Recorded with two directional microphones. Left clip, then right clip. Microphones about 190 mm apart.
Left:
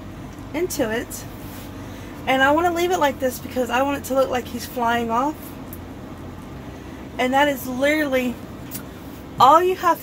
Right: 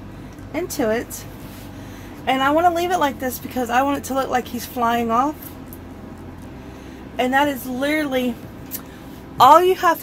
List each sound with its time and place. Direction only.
0.5 s speech: 50° right (ahead or behind)
2.2 s speech: 55° right (ahead or behind)
7.2 s speech: 55° right (ahead or behind)
9.4 s speech: 65° right (ahead or behind)